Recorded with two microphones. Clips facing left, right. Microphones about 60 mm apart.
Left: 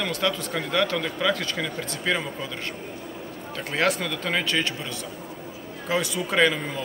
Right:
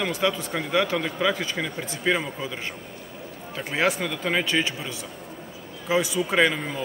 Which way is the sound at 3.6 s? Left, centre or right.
Centre.